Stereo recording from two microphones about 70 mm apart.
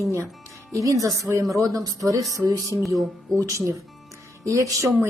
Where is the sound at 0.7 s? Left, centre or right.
Right.